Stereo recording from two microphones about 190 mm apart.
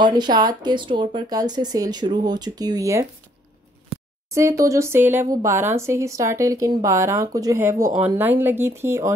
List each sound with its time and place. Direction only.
0.0 s a woman's voice: 20° right (ahead or behind)
4.3 s speech: 15° right (ahead or behind)